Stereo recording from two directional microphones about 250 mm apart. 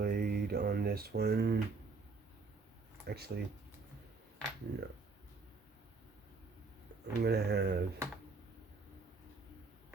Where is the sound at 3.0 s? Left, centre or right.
Right.